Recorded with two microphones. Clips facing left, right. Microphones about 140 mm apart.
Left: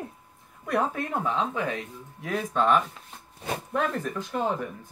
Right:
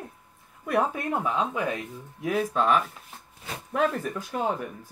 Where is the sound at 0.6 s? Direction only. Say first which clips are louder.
Right 1 dB; 10° right (ahead or behind).